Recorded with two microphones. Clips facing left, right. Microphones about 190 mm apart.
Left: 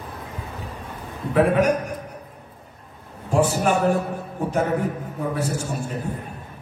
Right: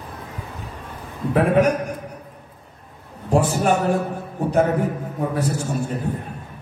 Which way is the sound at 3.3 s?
35° right (ahead or behind).